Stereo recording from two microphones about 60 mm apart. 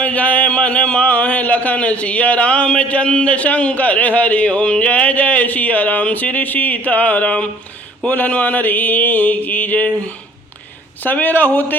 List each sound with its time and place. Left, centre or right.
0.0 s speech: left